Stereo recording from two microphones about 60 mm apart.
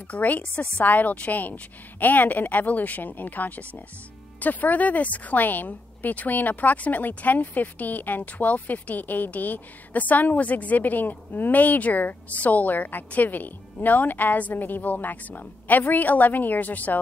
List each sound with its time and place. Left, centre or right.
0.1 s a woman's voice: left